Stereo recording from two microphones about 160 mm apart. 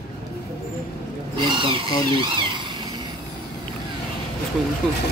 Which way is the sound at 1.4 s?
30° right (ahead or behind).